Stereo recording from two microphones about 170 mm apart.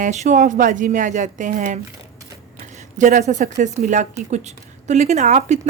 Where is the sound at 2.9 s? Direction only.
45° right (ahead or behind).